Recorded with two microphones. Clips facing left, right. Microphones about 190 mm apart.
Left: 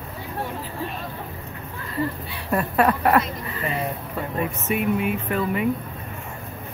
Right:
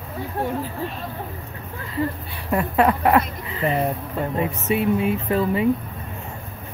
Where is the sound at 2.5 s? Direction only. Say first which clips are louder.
Right 1 dB; 15° right (ahead or behind).